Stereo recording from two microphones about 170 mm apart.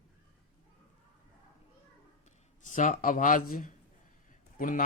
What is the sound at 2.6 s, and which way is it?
A man's voice, 45° left (ahead or behind).